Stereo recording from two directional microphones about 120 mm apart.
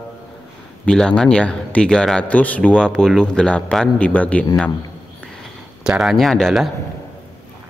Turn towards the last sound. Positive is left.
turn(degrees=0)  # may be behind; listen again after turning